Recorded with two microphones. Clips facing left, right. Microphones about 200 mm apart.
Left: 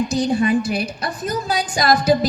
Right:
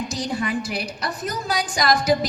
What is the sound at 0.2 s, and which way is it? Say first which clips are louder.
A woman's voice: left 8 dB; 25° left (ahead or behind).